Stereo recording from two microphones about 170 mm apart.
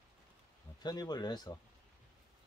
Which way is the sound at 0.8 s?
25° left (ahead or behind).